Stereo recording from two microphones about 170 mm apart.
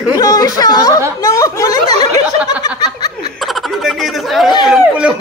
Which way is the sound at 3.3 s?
Centre (ahead or behind).